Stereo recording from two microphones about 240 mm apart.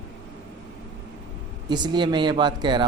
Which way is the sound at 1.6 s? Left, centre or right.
Centre.